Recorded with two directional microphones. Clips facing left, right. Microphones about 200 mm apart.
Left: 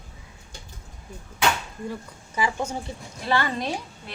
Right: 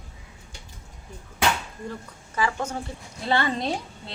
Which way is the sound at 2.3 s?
10° left (ahead or behind).